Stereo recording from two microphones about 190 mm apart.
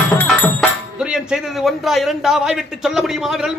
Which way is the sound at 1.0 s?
5° right (ahead or behind).